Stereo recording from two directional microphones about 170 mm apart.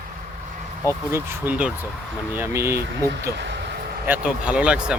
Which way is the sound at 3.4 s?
90° right.